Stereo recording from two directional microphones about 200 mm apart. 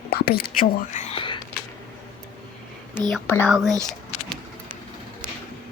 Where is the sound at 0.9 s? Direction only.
30° left (ahead or behind).